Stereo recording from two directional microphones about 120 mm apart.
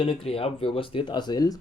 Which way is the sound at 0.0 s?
50° left (ahead or behind).